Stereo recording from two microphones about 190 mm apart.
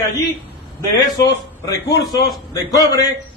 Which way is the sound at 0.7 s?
15° left (ahead or behind).